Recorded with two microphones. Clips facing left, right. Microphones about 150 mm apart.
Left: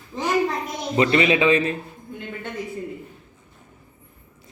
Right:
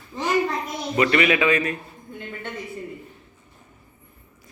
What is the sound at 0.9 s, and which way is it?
Speech, 25° left (ahead or behind).